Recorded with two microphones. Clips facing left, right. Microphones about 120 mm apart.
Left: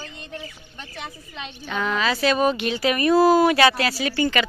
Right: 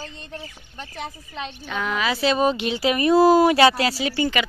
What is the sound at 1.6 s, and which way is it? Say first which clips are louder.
Speech: left 2 dB; centre (ahead or behind).